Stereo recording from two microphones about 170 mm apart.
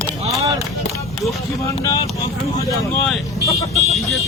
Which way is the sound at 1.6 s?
20° left (ahead or behind).